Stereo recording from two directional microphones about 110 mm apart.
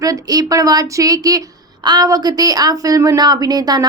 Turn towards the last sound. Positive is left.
turn(degrees=-35)  # may be behind; listen again after turning